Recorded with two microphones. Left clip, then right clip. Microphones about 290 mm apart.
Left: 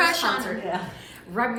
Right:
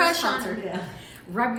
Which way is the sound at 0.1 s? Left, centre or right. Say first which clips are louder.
Left 1 dB; centre.